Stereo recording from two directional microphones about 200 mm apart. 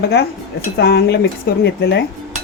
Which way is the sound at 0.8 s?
55° left (ahead or behind).